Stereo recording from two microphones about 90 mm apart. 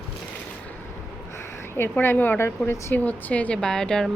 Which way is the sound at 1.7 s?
25° left (ahead or behind).